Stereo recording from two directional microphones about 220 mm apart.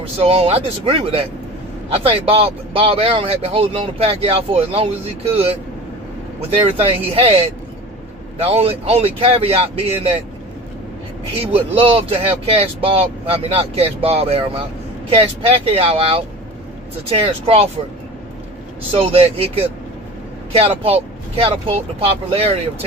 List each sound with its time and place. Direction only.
0.0 s a man's voice: 25° right (ahead or behind)
11.5 s a man's voice: 25° right (ahead or behind)
18.9 s a man's voice: 25° right (ahead or behind)